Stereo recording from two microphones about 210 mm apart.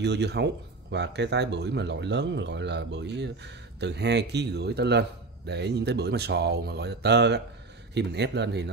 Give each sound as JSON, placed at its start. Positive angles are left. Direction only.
{"t": 0.0, "sound": "speech", "side_deg": -55}